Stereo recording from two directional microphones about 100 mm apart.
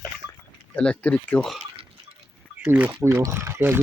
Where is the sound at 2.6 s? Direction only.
10° right (ahead or behind).